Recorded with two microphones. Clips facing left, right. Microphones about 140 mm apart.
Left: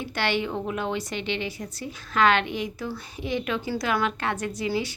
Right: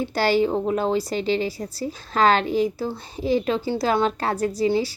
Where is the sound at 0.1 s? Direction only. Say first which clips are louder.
Right 6 dB; 35° right (ahead or behind).